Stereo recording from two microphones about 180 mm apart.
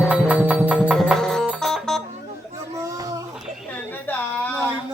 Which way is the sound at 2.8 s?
20° right (ahead or behind).